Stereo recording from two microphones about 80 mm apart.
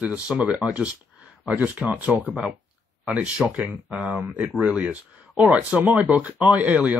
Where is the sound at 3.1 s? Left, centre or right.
Centre.